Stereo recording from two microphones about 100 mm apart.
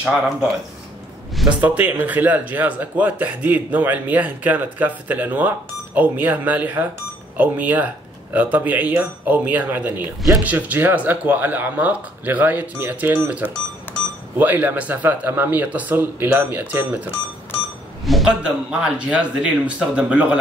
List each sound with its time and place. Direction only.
0.0 s speech: 10° right (ahead or behind)
1.6 s speech: 20° right (ahead or behind)
18.0 s a sound: centre (ahead or behind)
18.4 s speech: 10° right (ahead or behind)